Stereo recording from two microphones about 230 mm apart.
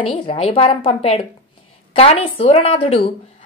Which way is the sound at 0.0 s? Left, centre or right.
Left.